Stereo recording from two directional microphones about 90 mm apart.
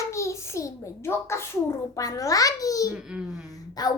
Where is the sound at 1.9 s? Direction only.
40° left (ahead or behind).